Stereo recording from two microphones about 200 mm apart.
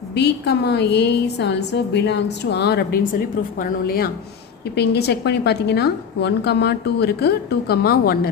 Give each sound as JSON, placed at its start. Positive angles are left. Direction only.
{"t": 0.1, "sound": "a woman's voice", "side_deg": 55}